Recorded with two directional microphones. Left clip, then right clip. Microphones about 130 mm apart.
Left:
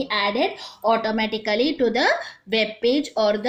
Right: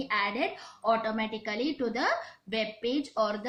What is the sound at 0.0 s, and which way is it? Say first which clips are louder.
A woman's voice: left 8 dB; 30° left (ahead or behind).